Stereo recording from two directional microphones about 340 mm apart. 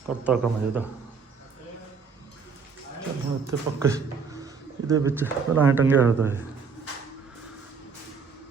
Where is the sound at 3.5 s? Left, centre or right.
Centre.